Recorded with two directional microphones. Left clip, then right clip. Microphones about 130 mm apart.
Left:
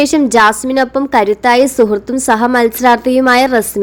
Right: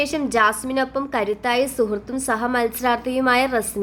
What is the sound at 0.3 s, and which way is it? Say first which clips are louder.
A woman's voice: left 9 dB; 40° left (ahead or behind).